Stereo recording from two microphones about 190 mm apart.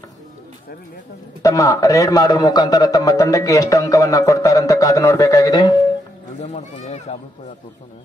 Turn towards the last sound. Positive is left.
turn(degrees=35)  # may be behind; listen again after turning